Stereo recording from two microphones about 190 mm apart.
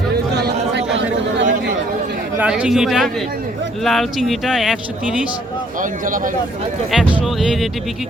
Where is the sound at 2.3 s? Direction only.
5° right (ahead or behind).